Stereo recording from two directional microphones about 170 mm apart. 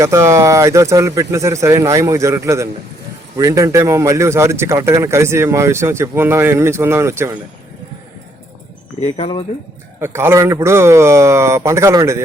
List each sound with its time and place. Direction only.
0.0 s speech: 15° right (ahead or behind)
9.1 s speech: 35° left (ahead or behind)
10.0 s speech: 15° right (ahead or behind)